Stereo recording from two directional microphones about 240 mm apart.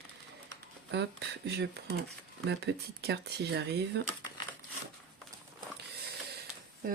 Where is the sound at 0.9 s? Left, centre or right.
Right.